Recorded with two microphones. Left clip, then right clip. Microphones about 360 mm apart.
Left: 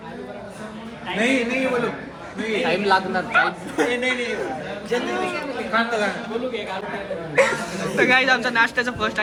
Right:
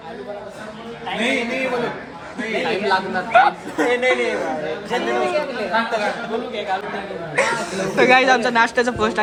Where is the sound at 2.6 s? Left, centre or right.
Centre.